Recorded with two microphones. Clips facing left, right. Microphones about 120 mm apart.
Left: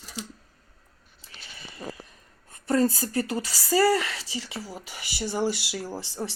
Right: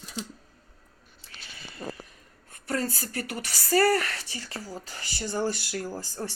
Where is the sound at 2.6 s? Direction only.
25° left (ahead or behind).